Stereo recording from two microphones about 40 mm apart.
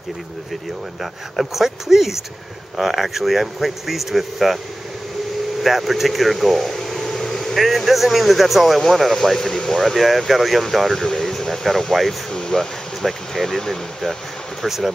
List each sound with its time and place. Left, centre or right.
1.3 s speech: centre
5.6 s air conditioning: centre
7.6 s speech: centre
12.3 s air conditioning: centre
13.0 s speech: centre
14.6 s speech: centre